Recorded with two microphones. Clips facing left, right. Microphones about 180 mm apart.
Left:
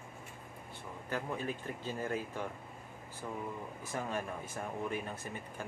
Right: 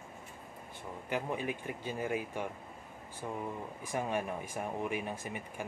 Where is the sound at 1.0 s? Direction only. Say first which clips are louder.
Right 2 dB; 15° right (ahead or behind).